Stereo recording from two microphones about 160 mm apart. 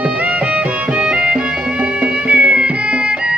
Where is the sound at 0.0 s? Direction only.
10° right (ahead or behind).